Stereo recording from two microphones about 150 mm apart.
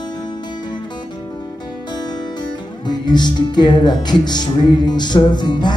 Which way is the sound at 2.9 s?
30° left (ahead or behind).